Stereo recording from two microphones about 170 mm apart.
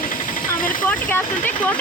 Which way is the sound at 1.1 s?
10° left (ahead or behind).